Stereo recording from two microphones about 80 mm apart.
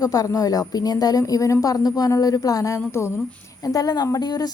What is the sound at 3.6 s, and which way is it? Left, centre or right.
Speech, left.